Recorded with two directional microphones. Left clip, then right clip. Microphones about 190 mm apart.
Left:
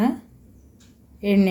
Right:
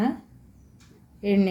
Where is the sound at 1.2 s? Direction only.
15° left (ahead or behind).